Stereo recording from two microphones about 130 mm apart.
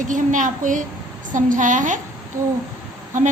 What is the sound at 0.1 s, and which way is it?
A woman's voice, 80° right.